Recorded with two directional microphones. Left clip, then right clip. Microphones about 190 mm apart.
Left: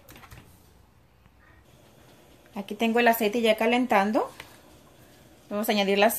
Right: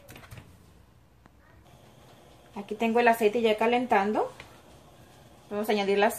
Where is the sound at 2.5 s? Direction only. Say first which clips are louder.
Left 1 dB; 60° left (ahead or behind).